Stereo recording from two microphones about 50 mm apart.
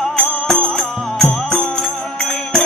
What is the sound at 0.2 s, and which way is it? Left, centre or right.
Music, centre.